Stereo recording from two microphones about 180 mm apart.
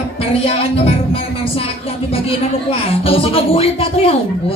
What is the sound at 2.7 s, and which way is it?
A man's voice, 30° left (ahead or behind).